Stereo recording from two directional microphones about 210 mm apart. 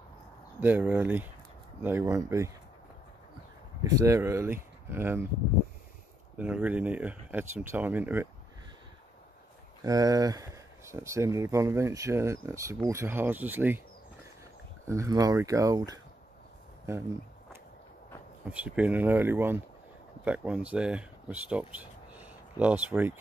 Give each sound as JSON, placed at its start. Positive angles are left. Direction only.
{"t": 0.6, "sound": "speech", "side_deg": -10}
{"t": 3.8, "sound": "speech", "side_deg": -15}
{"t": 6.3, "sound": "speech", "side_deg": -5}
{"t": 9.8, "sound": "speech", "side_deg": -15}
{"t": 14.9, "sound": "speech", "side_deg": -15}
{"t": 18.5, "sound": "speech", "side_deg": -5}